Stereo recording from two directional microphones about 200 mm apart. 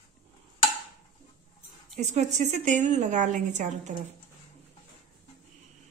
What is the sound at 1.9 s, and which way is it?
A woman's voice, 35° right (ahead or behind).